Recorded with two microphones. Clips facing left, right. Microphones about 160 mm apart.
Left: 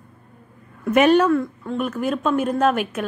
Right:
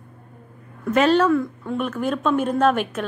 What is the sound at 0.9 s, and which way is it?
Speech, 15° left (ahead or behind).